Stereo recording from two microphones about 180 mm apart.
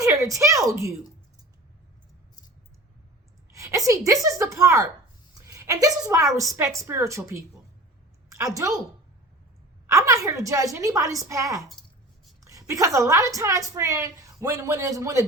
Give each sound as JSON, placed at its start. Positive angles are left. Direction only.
{"t": 0.0, "sound": "speech", "side_deg": -20}
{"t": 3.5, "sound": "a woman's voice", "side_deg": -15}
{"t": 8.5, "sound": "a woman's voice", "side_deg": -15}
{"t": 9.8, "sound": "a woman's voice", "side_deg": -15}